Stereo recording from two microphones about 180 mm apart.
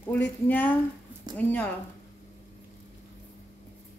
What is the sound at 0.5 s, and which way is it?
Speech, 10° left (ahead or behind).